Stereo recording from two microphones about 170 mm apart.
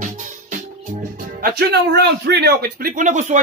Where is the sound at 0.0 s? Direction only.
50° right (ahead or behind); by 2.9 s 70° right (ahead or behind).